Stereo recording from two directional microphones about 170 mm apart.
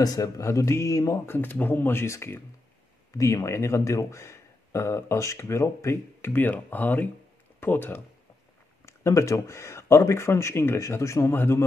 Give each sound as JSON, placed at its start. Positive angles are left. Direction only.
{"t": 0.0, "sound": "speech", "side_deg": 20}